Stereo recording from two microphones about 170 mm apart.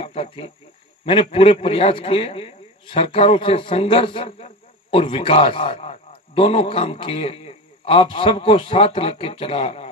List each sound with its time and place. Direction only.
0.0 s a man's voice: 35° left (ahead or behind)